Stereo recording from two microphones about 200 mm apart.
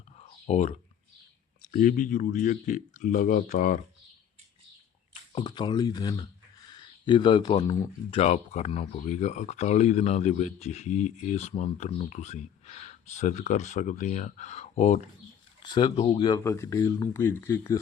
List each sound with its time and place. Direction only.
0.4 s speech: 35° left (ahead or behind)
5.3 s speech: 20° left (ahead or behind)
8.1 s speech: 30° left (ahead or behind); by 17.7 s 10° left (ahead or behind)